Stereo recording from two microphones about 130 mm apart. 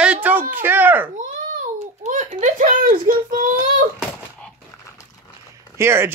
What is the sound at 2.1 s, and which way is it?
A child's voice, 70° right (ahead or behind).